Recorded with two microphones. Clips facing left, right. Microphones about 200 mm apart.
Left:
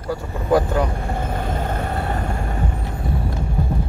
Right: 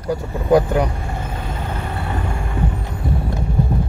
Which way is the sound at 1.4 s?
50° left (ahead or behind).